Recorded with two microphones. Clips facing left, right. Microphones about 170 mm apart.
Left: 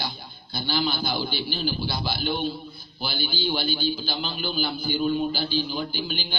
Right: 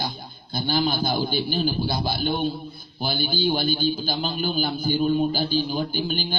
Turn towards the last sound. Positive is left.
turn(degrees=-45)  # may be behind; listen again after turning